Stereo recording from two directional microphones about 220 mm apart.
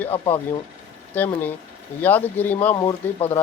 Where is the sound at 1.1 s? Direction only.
10° left (ahead or behind).